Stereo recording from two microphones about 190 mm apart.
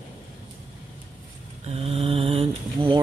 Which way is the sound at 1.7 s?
30° right (ahead or behind).